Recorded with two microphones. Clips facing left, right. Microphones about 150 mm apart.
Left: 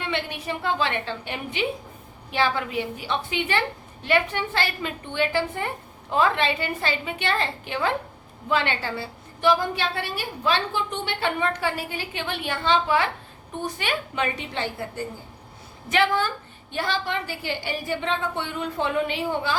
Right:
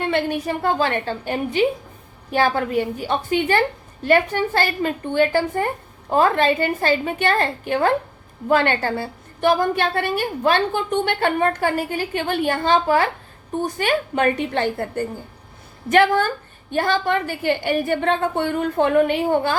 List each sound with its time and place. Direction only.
0.0 s a woman's voice: 45° right (ahead or behind)